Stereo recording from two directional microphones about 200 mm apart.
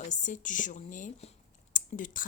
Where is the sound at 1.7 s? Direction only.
40° left (ahead or behind).